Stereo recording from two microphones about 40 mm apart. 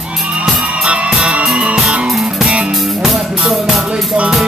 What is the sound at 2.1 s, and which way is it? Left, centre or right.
Music, centre.